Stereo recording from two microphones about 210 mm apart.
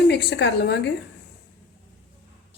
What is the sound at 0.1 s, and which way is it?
Speech, 55° left (ahead or behind).